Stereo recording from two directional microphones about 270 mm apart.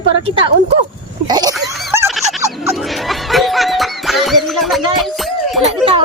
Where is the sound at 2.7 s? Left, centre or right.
Centre.